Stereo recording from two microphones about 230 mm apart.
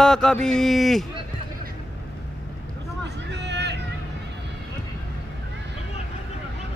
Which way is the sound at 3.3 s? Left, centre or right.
Right.